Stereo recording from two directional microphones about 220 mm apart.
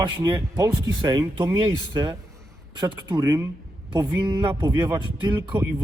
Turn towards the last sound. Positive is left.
turn(degrees=-20)  # may be behind; listen again after turning